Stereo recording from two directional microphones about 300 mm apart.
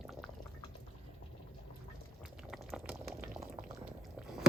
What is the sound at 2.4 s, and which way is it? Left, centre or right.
Boiling, centre.